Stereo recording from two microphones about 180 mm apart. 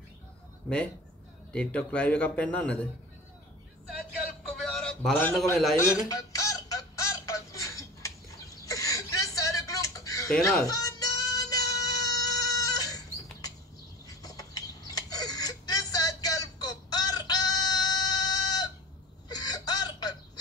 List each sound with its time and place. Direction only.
1.5 s speech: 5° left (ahead or behind)
4.6 s a man's voice: 5° left (ahead or behind)
5.8 s music: 15° left (ahead or behind)
8.6 s a sound: 20° left (ahead or behind)
10.7 s music: 20° left (ahead or behind)
14.0 s a sound: 20° left (ahead or behind)